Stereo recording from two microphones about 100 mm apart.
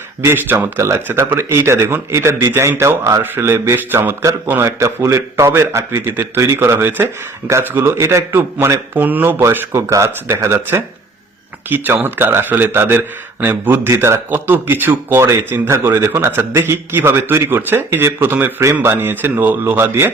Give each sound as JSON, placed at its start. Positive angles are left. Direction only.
{"t": 0.3, "sound": "speech", "side_deg": -25}
{"t": 4.8, "sound": "speech", "side_deg": -30}
{"t": 9.0, "sound": "speech", "side_deg": -20}
{"t": 14.3, "sound": "speech", "side_deg": -20}